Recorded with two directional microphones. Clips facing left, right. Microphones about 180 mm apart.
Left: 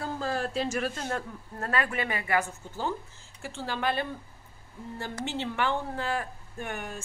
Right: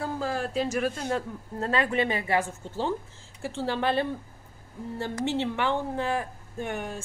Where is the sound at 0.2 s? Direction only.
10° right (ahead or behind).